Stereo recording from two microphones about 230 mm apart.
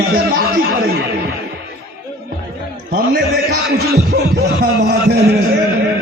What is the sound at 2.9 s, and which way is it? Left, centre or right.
A man's voice, right.